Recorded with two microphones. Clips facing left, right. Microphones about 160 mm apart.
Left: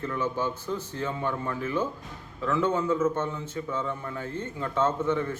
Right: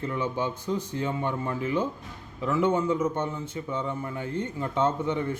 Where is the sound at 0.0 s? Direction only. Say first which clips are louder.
Even; 15° right (ahead or behind).